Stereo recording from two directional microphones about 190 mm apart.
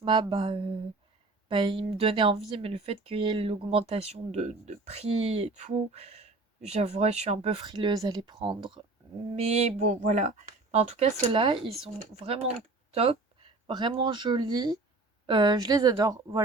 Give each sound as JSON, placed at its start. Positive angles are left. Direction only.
{"t": 0.0, "sound": "speech", "side_deg": -25}